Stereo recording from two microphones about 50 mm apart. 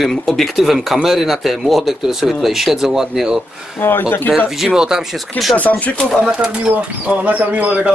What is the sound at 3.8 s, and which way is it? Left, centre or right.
Speech, left.